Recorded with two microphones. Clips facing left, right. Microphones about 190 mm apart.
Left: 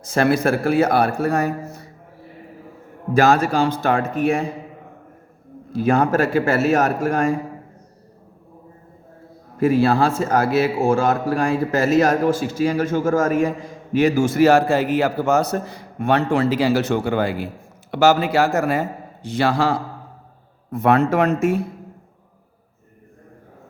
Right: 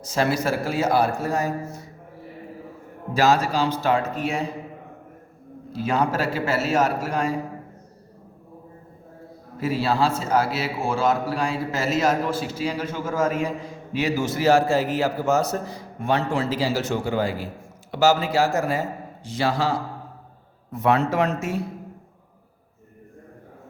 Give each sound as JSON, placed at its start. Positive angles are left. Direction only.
{"t": 0.0, "sound": "a man's voice", "side_deg": 55}
{"t": 3.2, "sound": "a man's voice", "side_deg": 55}
{"t": 5.7, "sound": "a man's voice", "side_deg": 50}
{"t": 9.6, "sound": "a man's voice", "side_deg": 50}